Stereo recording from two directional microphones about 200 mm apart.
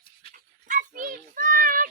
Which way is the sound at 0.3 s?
40° right (ahead or behind).